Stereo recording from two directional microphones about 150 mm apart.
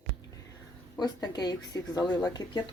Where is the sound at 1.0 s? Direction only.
25° left (ahead or behind).